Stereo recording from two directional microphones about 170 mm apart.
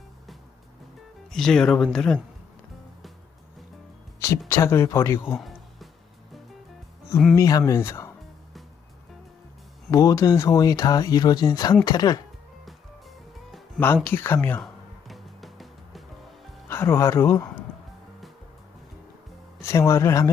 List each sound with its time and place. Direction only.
1.3 s speech: 5° left (ahead or behind)
4.2 s speech: 15° left (ahead or behind)
5.4 s music: centre (ahead or behind)
7.3 s speech: 20° left (ahead or behind)
9.9 s speech: 20° left (ahead or behind)
12.6 s music: centre (ahead or behind)
13.8 s speech: 10° left (ahead or behind)
15.0 s music: centre (ahead or behind)
16.6 s speech: 15° left (ahead or behind)
19.6 s speech: 15° left (ahead or behind)